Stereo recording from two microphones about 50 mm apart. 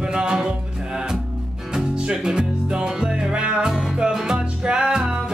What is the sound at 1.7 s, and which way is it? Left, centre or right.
Music, centre.